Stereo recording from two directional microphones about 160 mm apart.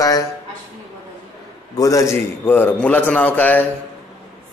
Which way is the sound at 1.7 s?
20° left (ahead or behind).